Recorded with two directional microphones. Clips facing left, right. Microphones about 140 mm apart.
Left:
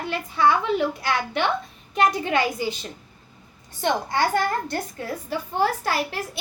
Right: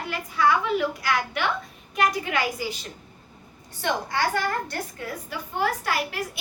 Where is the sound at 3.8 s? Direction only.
25° left (ahead or behind).